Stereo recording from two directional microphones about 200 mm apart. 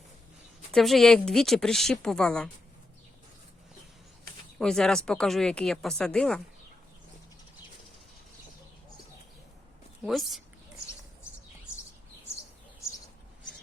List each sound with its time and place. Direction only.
0.7 s speech: centre (ahead or behind)
4.5 s speech: 5° left (ahead or behind)
10.0 s speech: centre (ahead or behind)